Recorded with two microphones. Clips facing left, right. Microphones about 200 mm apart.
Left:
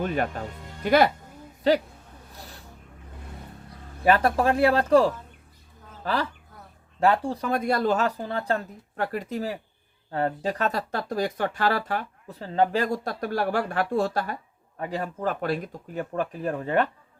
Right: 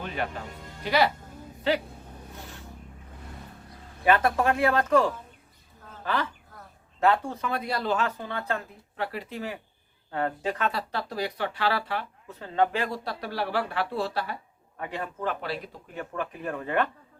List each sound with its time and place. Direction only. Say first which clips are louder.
0.0 s music: left 6 dB; 45° left (ahead or behind)
0.9 s speech: left 4 dB; 50° left (ahead or behind)
2.3 s a sound: even; 35° left (ahead or behind)
4.0 s speech: left 2 dB; 35° left (ahead or behind)
7.0 s speech: left 2 dB; 35° left (ahead or behind)